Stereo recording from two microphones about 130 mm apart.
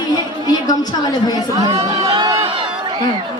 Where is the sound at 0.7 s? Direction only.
30° left (ahead or behind).